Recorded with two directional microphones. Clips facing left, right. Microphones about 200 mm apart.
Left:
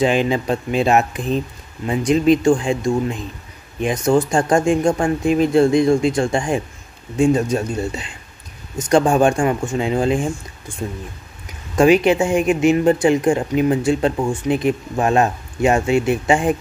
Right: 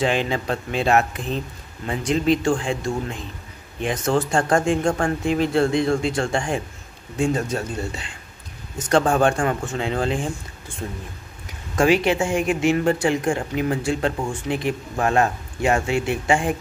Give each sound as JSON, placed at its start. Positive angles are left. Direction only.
{"t": 0.0, "sound": "speech", "side_deg": 15}
{"t": 11.7, "sound": "speech", "side_deg": 20}